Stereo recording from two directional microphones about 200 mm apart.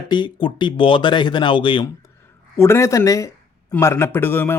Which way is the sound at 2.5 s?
15° left (ahead or behind).